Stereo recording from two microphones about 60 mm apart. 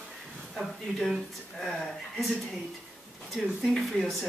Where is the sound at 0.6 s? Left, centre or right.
Centre.